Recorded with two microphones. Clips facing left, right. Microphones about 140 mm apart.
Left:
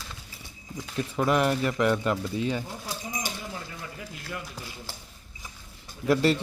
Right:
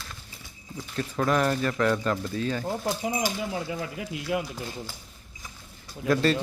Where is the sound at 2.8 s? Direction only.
80° right.